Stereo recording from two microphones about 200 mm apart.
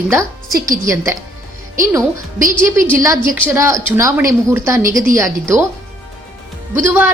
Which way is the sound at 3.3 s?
15° right (ahead or behind).